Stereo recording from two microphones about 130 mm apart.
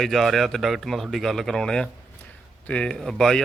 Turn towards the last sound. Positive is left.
turn(degrees=5)  # may be behind; listen again after turning